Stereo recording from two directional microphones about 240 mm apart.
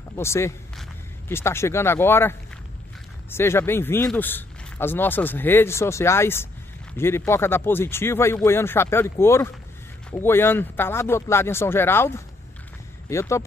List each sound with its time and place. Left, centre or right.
0.1 s speech: centre